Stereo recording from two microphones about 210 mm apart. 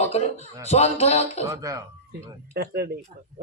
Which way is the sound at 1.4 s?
15° right (ahead or behind).